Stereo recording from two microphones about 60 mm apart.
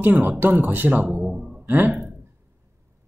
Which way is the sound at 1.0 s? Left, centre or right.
Centre.